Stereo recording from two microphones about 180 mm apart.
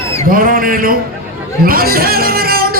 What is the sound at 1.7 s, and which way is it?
Music, 55° right (ahead or behind).